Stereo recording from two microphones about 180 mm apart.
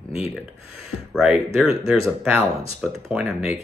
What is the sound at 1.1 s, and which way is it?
Speech, 5° right (ahead or behind).